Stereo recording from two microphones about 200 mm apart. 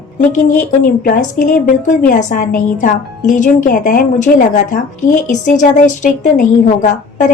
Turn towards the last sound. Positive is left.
turn(degrees=40)  # may be behind; listen again after turning